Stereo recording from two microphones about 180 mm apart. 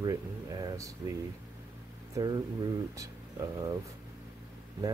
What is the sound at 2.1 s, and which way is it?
Speech, 20° right (ahead or behind).